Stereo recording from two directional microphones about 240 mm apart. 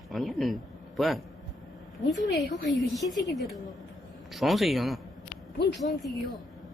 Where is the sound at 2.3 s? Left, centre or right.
Left.